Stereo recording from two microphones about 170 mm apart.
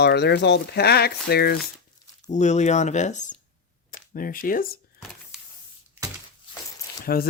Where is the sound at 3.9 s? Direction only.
55° left (ahead or behind).